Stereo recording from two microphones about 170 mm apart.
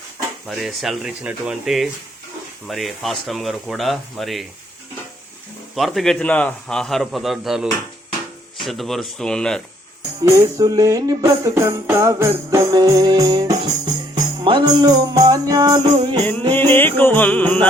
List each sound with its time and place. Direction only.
0.4 s a man's voice: centre (ahead or behind)
5.7 s a man's voice: centre (ahead or behind)
10.2 s music: 20° right (ahead or behind)
16.5 s music: 10° left (ahead or behind)